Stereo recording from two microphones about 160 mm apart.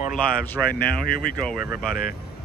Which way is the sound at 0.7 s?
70° left (ahead or behind).